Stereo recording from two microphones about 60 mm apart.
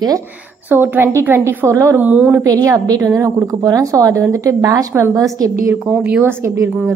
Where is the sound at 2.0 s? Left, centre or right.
Right.